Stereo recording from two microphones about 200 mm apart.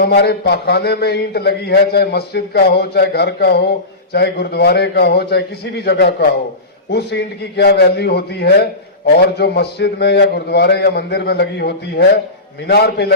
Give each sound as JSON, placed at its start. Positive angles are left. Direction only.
{"t": 0.0, "sound": "a man's voice", "side_deg": 55}